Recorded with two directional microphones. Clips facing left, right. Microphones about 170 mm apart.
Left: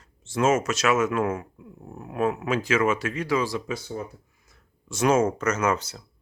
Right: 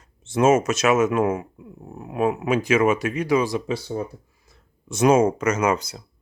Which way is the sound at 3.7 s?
35° right (ahead or behind).